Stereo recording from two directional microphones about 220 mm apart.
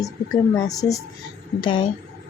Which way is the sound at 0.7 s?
15° left (ahead or behind).